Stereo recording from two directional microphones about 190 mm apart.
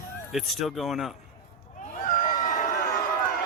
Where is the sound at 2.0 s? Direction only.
45° left (ahead or behind).